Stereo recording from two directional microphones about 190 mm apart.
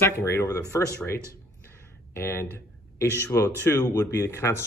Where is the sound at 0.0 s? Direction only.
15° left (ahead or behind).